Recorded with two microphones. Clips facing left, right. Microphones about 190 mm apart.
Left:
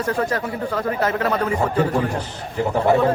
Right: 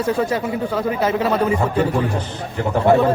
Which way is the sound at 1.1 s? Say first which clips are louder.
Right 3 dB; 20° right (ahead or behind).